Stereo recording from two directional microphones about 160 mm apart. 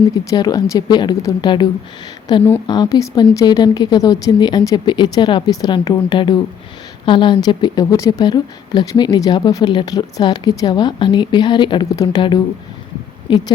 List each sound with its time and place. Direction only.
0.3 s speech: 25° left (ahead or behind)